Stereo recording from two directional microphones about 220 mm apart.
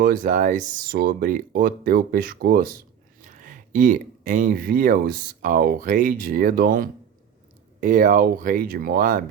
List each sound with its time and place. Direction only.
0.0 s speech: 40° right (ahead or behind)